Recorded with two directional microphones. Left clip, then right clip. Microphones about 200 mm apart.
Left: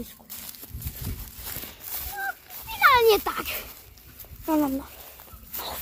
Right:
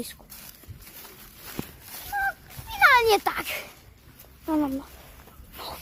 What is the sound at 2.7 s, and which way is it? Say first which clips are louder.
Speech: even; 15° right (ahead or behind).